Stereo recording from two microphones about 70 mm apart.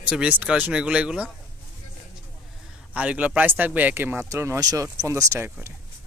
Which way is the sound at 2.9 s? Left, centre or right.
Centre.